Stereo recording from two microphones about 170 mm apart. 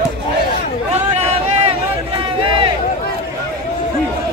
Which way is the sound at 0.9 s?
35° right (ahead or behind).